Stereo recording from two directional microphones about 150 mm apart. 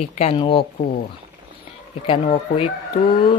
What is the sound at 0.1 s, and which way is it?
Speech, 45° left (ahead or behind).